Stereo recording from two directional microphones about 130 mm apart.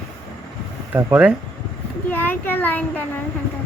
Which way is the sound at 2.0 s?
15° left (ahead or behind).